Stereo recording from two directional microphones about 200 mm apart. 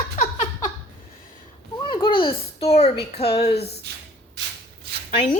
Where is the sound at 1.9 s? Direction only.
25° left (ahead or behind).